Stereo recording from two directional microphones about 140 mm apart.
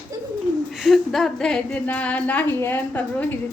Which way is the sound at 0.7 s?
Centre (ahead or behind).